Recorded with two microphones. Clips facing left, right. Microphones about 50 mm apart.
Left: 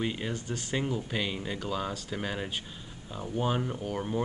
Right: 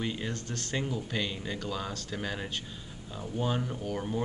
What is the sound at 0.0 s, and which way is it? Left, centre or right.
Speech, centre.